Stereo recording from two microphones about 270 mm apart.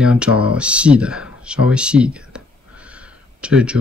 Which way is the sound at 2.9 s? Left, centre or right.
Centre.